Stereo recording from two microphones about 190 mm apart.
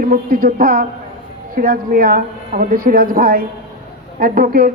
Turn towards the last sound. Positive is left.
turn(degrees=-50)  # may be behind; listen again after turning